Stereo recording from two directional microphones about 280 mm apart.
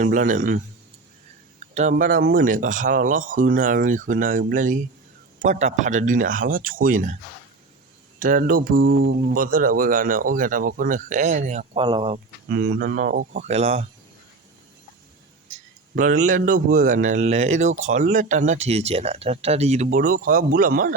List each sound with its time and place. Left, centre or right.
0.0 s speech: right
8.2 s speech: right
9.3 s speech: right
12.5 s speech: right
15.5 s speech: right